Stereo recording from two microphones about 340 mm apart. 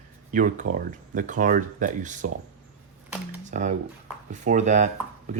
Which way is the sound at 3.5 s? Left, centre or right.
Right.